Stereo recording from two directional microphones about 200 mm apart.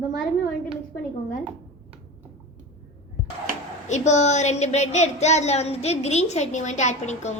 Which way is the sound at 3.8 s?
35° left (ahead or behind).